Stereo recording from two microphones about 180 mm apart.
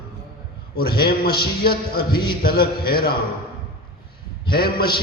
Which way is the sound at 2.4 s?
55° left (ahead or behind).